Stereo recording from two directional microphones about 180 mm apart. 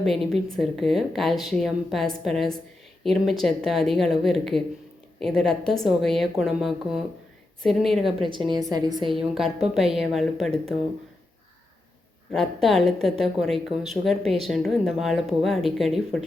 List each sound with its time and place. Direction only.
0.0 s a woman's voice: centre (ahead or behind)
8.3 s a woman's voice: 25° right (ahead or behind)
9.1 s a woman's voice: centre (ahead or behind)
12.3 s a woman's voice: centre (ahead or behind)